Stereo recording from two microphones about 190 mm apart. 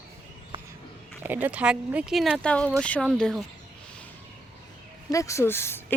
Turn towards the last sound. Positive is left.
turn(degrees=10)  # may be behind; listen again after turning